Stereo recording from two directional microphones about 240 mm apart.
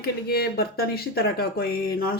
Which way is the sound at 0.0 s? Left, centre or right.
Left.